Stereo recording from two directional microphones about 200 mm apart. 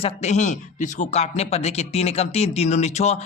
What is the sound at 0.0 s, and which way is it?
Speech, 35° left (ahead or behind).